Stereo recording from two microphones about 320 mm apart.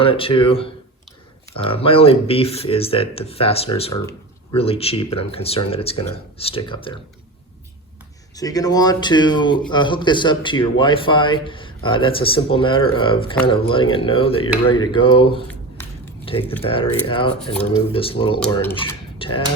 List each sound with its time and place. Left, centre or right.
0.0 s speech: centre
8.4 s speech: centre
18.5 s mechanisms: centre